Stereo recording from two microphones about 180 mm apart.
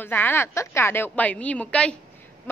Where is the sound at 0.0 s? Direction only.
10° left (ahead or behind).